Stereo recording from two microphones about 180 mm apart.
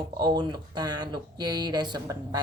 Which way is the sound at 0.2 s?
25° right (ahead or behind).